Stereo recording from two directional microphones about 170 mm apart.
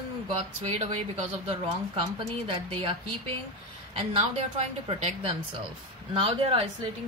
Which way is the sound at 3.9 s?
35° right (ahead or behind).